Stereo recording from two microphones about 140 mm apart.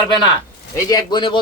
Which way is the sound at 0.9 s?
30° left (ahead or behind).